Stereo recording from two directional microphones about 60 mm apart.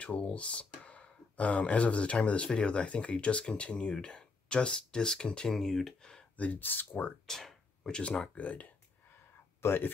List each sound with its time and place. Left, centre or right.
0.0 s speech: left
6.3 s speech: left
7.2 s a sound: centre
8.0 s speech: centre
8.4 s speech: left
9.6 s speech: left